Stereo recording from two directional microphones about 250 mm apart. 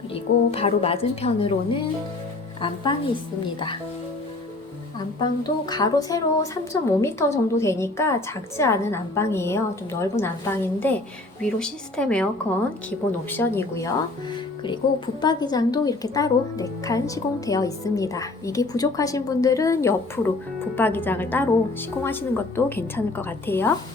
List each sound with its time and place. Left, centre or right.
0.1 s a woman's voice: left
5.2 s a woman's voice: centre